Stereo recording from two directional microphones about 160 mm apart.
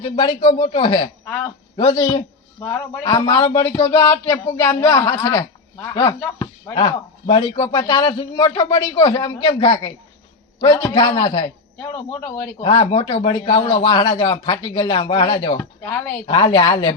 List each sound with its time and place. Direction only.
0.6 s speech: 25° left (ahead or behind)
1.2 s speech: 10° left (ahead or behind)
1.7 s a man's voice: 25° left (ahead or behind)
6.7 s a woman's voice: 30° left (ahead or behind)
11.8 s speech: 15° left (ahead or behind)
12.5 s speech: 35° left (ahead or behind)
15.8 s speech: 5° left (ahead or behind)
16.2 s speech: 30° left (ahead or behind)